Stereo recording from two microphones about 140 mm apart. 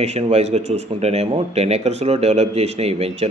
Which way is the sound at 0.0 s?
50° right (ahead or behind).